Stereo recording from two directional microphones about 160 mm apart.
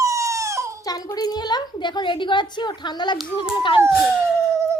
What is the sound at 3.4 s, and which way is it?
Speech, 30° left (ahead or behind).